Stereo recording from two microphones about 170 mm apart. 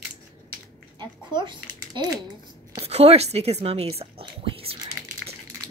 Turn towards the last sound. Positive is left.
turn(degrees=-35)  # may be behind; listen again after turning